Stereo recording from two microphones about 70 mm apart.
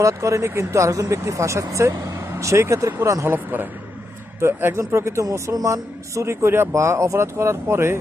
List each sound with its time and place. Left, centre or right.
0.0 s a man's voice: right
3.2 s a man's voice: right